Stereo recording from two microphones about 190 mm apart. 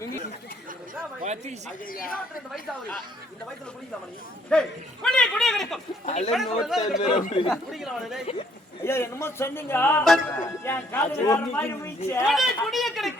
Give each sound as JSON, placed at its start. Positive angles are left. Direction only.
{"t": 1.2, "sound": "a woman's voice", "side_deg": -40}
{"t": 1.9, "sound": "a woman's voice", "side_deg": 50}
{"t": 4.5, "sound": "a man's voice", "side_deg": 5}
{"t": 6.1, "sound": "speech", "side_deg": 35}
{"t": 6.3, "sound": "a man's voice", "side_deg": 0}
{"t": 7.0, "sound": "speech", "side_deg": 40}
{"t": 7.5, "sound": "a man's voice", "side_deg": 0}
{"t": 8.8, "sound": "a man's voice", "side_deg": 15}
{"t": 10.3, "sound": "a man's voice", "side_deg": 15}
{"t": 12.2, "sound": "a man's voice", "side_deg": 0}